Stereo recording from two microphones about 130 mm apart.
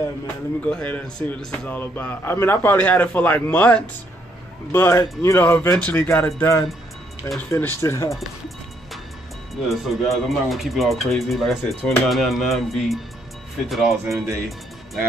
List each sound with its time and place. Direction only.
0.7 s a man's voice: 10° left (ahead or behind)
9.7 s speech: centre (ahead or behind)
14.0 s speech: 20° right (ahead or behind)